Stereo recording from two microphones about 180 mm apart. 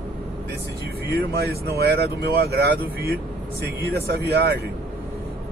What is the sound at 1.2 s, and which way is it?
Speech, 60° right (ahead or behind).